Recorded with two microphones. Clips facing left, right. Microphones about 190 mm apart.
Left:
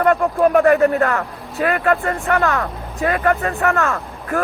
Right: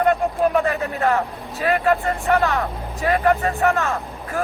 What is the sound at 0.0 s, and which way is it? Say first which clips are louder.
Speech: left 3 dB; 55° left (ahead or behind).